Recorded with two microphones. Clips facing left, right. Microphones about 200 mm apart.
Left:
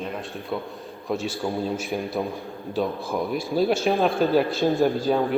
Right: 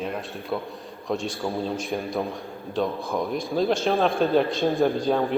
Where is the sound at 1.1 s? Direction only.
5° left (ahead or behind).